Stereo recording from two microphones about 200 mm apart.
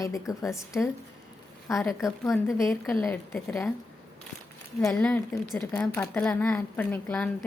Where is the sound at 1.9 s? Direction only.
15° left (ahead or behind).